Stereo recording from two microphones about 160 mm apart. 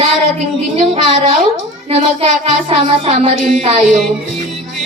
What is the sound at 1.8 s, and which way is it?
Speech, 40° right (ahead or behind).